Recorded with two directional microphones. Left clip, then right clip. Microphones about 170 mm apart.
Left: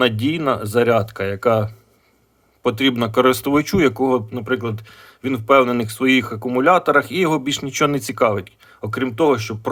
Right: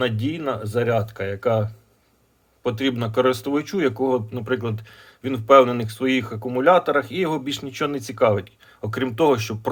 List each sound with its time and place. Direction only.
0.0 s speech: 35° left (ahead or behind)
8.6 s speech: 15° left (ahead or behind)